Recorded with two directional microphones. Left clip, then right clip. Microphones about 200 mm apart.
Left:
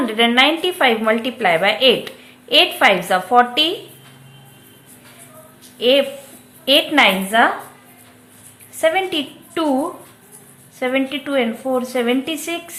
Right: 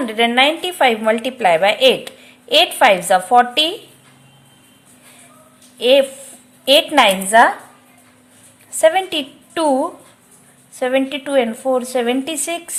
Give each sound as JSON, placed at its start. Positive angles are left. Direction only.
{"t": 0.0, "sound": "a woman's voice", "side_deg": -25}
{"t": 5.7, "sound": "a woman's voice", "side_deg": -25}
{"t": 8.8, "sound": "a woman's voice", "side_deg": -30}